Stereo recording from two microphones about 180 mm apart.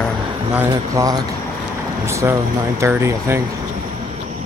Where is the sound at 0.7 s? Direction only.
20° right (ahead or behind).